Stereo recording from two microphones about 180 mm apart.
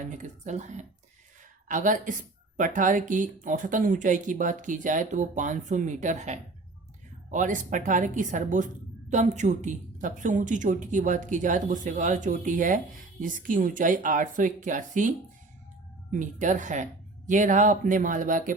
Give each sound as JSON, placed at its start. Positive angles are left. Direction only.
{"t": 0.0, "sound": "speech", "side_deg": -45}
{"t": 16.1, "sound": "speech", "side_deg": -45}